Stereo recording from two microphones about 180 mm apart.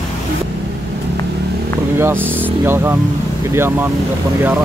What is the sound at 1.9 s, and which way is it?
Speech, 10° right (ahead or behind).